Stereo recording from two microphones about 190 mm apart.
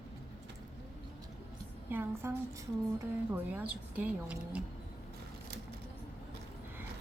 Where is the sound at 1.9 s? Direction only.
10° right (ahead or behind).